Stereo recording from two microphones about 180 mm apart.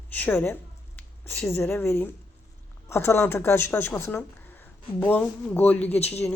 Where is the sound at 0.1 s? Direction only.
10° left (ahead or behind).